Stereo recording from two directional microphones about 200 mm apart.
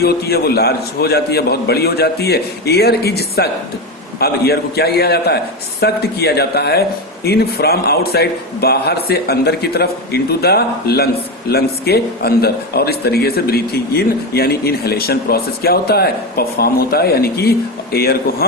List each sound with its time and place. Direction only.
0.0 s speech: 50° left (ahead or behind)